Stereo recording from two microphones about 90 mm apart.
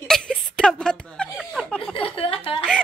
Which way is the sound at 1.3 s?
5° right (ahead or behind).